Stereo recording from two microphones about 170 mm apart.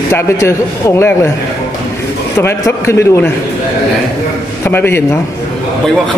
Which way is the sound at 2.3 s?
15° left (ahead or behind).